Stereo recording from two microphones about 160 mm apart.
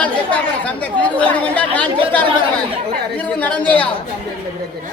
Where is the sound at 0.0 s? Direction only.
5° left (ahead or behind).